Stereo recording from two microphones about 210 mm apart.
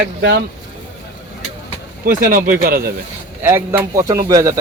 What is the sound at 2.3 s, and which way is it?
Speech, 40° right (ahead or behind).